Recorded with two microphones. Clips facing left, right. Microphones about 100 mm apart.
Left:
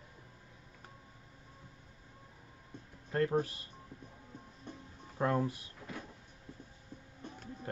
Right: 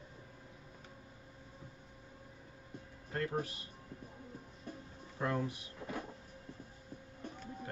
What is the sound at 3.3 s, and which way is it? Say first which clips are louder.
Speech: left 6 dB; 30° left (ahead or behind).